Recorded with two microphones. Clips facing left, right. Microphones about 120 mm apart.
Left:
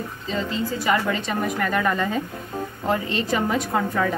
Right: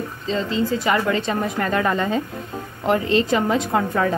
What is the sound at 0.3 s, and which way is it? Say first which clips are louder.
Speech: right 4 dB; 25° right (ahead or behind).